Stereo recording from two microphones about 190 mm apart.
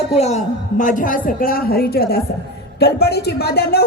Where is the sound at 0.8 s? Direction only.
45° left (ahead or behind).